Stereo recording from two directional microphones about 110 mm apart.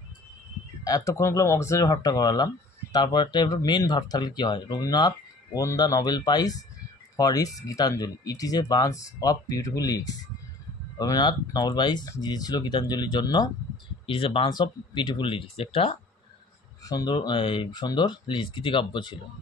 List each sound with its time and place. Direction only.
0.8 s speech: 30° left (ahead or behind)
14.0 s speech: 55° left (ahead or behind)
16.8 s speech: 40° left (ahead or behind)